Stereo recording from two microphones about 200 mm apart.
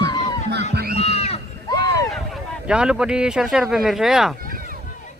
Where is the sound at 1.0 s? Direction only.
30° left (ahead or behind).